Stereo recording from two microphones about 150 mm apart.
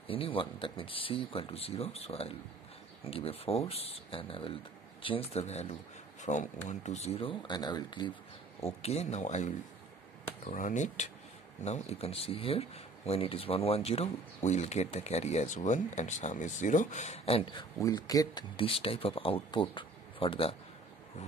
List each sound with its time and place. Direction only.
0.0 s speech: 35° left (ahead or behind)
8.6 s speech: 45° left (ahead or behind)
10.5 s speech: 55° left (ahead or behind)
11.6 s speech: 45° left (ahead or behind)
17.8 s speech: 25° left (ahead or behind)
18.6 s speech: 40° left (ahead or behind)